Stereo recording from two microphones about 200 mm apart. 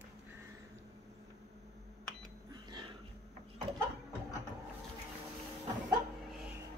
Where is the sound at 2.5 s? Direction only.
20° right (ahead or behind).